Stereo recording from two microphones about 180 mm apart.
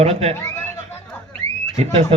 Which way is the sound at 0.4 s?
15° left (ahead or behind).